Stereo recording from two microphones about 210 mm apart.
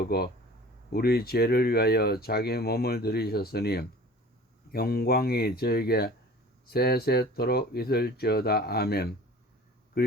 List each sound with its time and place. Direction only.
0.1 s speech: 45° left (ahead or behind)